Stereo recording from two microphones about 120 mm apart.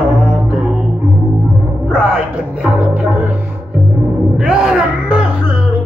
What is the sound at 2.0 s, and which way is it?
Music, 10° right (ahead or behind).